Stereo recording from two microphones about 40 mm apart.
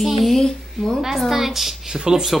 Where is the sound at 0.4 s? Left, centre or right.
Centre.